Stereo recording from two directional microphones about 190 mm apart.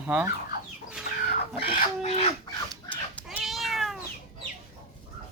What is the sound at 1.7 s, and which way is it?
Speech, 40° left (ahead or behind).